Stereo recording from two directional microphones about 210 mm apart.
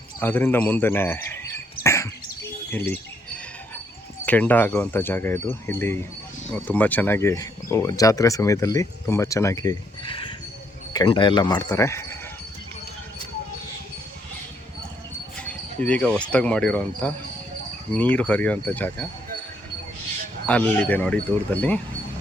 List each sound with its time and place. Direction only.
0.2 s speech: 10° left (ahead or behind)
2.7 s bird: 10° left (ahead or behind)
4.3 s speech: 10° left (ahead or behind)
15.4 s speech: 5° left (ahead or behind)
20.5 s speech: 5° left (ahead or behind)